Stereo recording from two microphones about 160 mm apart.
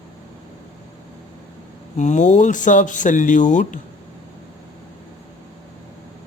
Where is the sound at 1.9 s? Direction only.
50° left (ahead or behind).